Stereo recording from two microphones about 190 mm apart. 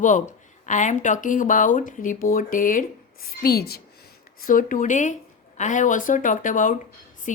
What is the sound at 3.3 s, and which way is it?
A woman's voice, 55° left (ahead or behind).